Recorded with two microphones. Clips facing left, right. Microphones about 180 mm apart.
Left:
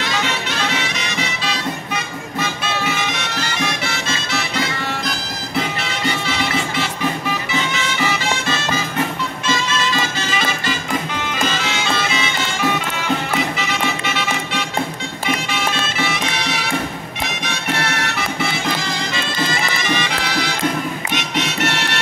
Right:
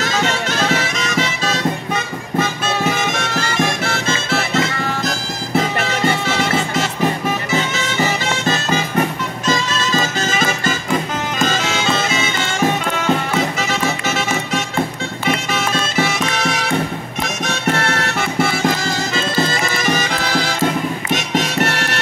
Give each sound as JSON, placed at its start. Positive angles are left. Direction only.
{"t": 0.0, "sound": "music", "side_deg": -45}
{"t": 19.3, "sound": "bagpipes", "side_deg": -40}
{"t": 21.4, "sound": "music", "side_deg": -45}